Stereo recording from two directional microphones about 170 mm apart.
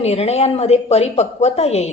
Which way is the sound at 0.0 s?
40° left (ahead or behind).